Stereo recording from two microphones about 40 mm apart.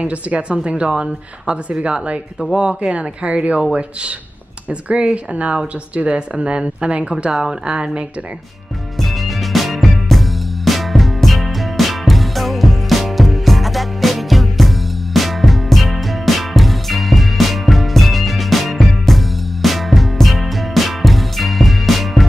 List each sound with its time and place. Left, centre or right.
0.0 s speech: right
4.6 s speech: right
9.0 s music: centre